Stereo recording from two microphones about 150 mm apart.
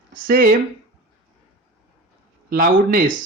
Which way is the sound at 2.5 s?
70° right (ahead or behind).